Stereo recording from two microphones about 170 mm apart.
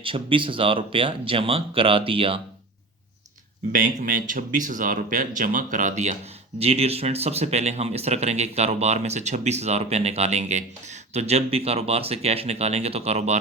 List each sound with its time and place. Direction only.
0.0 s speech: 30° right (ahead or behind)
3.7 s speech: 50° right (ahead or behind)